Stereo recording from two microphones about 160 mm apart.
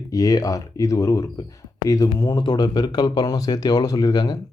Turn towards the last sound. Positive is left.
turn(degrees=25)  # may be behind; listen again after turning